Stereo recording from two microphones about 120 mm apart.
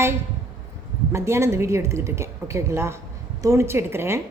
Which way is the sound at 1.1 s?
25° right (ahead or behind).